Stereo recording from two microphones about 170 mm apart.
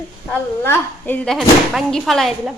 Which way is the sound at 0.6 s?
10° left (ahead or behind).